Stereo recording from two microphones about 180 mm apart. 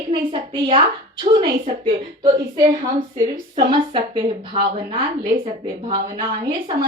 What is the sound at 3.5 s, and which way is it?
A woman's voice, 25° right (ahead or behind).